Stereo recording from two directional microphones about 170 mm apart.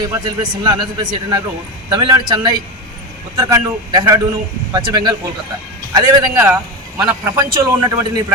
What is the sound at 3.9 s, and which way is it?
A man's voice, 20° right (ahead or behind).